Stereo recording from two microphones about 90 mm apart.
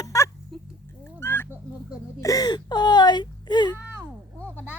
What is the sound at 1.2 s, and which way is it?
Fowl, 25° left (ahead or behind).